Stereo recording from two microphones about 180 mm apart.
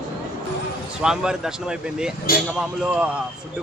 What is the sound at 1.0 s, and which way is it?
A man's voice, 5° right (ahead or behind).